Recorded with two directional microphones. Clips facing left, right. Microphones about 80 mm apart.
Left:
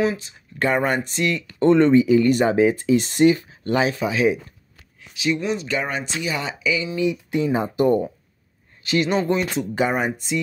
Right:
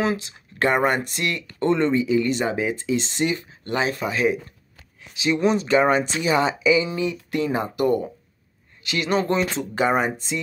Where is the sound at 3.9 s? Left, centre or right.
Centre.